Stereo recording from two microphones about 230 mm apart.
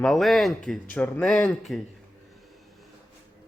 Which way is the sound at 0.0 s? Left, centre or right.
Centre.